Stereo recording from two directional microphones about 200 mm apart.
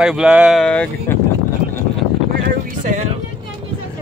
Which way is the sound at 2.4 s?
40° right (ahead or behind).